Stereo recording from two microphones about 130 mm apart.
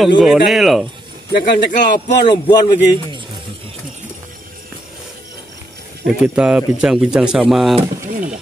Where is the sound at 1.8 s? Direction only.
35° left (ahead or behind).